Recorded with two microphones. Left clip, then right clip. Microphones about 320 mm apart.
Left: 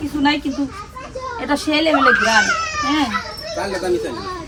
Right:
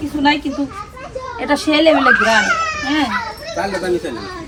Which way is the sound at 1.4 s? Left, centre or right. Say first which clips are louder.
Right 4 dB; centre.